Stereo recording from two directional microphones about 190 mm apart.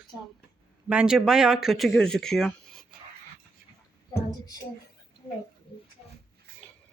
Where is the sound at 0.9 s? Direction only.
5° right (ahead or behind).